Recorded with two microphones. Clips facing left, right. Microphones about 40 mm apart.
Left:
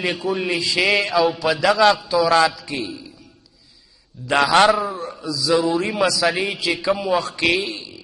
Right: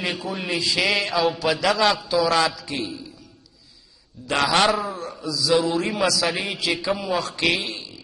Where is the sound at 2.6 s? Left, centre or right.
Left.